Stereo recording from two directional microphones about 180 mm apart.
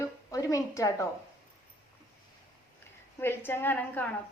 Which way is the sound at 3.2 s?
10° left (ahead or behind).